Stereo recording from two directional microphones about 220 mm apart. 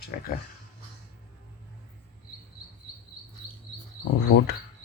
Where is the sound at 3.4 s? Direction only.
25° left (ahead or behind).